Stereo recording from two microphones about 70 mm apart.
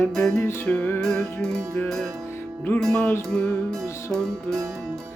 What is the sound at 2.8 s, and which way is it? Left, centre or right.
Music, centre.